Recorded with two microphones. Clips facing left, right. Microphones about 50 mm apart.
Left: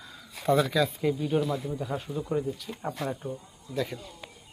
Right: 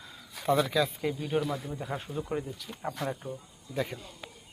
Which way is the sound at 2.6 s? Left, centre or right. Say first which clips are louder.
Left 2 dB; centre.